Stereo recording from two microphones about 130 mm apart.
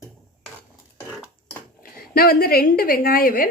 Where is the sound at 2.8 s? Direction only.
90° left.